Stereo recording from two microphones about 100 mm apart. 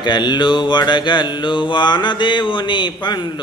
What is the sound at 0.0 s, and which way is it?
Mantra, 50° left (ahead or behind).